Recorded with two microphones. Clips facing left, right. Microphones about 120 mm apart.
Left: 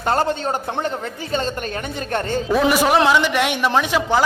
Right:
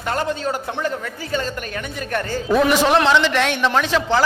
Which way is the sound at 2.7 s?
10° left (ahead or behind).